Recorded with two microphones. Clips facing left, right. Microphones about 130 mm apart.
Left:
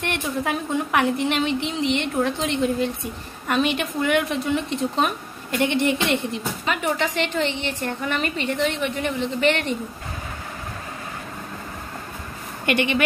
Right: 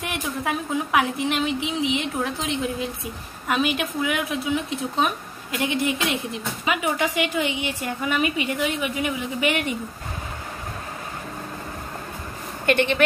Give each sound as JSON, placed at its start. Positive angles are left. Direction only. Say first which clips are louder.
{"t": 0.0, "sound": "a woman's voice", "louder": "left 2 dB", "side_deg": 0}
{"t": 12.6, "sound": "speech", "louder": "right 1 dB", "side_deg": -55}